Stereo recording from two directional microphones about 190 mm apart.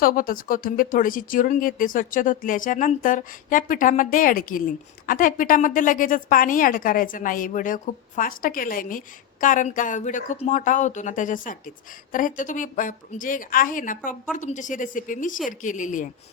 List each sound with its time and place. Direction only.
0.0 s speech: 50° left (ahead or behind)